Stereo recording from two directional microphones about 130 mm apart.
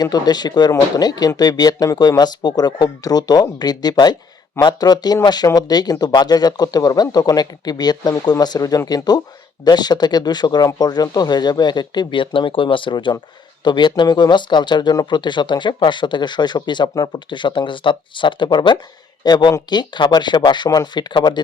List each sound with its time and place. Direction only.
0.0 s speech: 30° left (ahead or behind)